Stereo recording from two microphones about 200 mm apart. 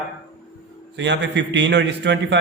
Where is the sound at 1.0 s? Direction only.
65° right (ahead or behind).